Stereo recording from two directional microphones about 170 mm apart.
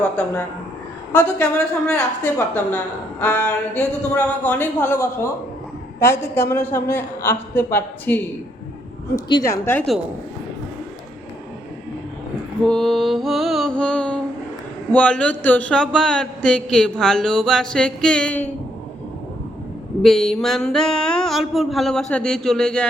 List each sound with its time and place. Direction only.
0.0 s speech: 10° left (ahead or behind)
12.6 s speech: centre (ahead or behind)
20.0 s speech: centre (ahead or behind)